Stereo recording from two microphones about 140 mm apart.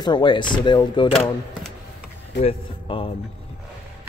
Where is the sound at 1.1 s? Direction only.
5° left (ahead or behind).